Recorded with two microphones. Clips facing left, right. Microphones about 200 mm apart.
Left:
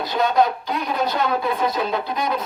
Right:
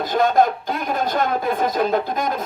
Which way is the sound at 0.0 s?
50° right (ahead or behind).